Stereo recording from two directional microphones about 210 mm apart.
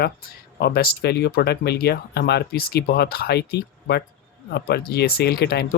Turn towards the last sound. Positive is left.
turn(degrees=50)  # may be behind; listen again after turning